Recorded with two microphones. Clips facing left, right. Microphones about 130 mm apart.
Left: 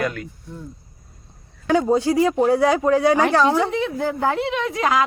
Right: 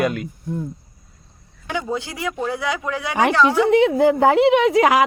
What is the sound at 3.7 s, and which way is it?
Speech, 80° right.